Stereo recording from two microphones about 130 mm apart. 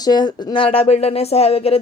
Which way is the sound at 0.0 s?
35° left (ahead or behind).